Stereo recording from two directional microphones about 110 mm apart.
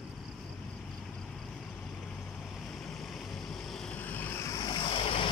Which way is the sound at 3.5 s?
5° left (ahead or behind).